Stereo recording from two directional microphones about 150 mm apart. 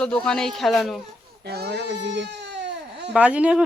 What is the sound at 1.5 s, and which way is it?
Speech, 90° right.